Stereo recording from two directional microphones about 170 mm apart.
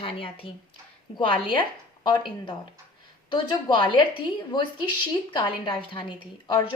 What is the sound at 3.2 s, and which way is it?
Speech, 30° left (ahead or behind).